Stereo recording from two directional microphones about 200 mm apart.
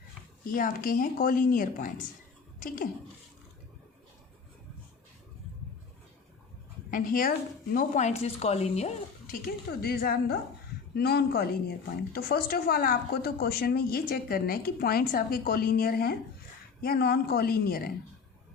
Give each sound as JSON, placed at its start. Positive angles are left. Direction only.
{"t": 0.5, "sound": "speech", "side_deg": 45}
{"t": 6.9, "sound": "speech", "side_deg": 45}
{"t": 9.8, "sound": "speech", "side_deg": 50}